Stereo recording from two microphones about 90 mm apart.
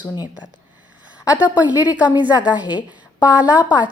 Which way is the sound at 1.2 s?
15° right (ahead or behind).